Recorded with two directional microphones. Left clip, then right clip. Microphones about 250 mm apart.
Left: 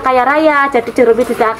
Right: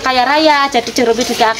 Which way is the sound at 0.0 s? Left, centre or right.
Right.